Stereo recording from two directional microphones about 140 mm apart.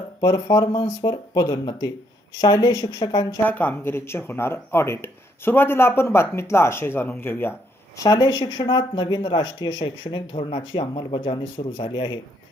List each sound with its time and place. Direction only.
0.2 s speech: 20° left (ahead or behind)
3.4 s speech: 10° left (ahead or behind)
8.0 s speech: 30° left (ahead or behind)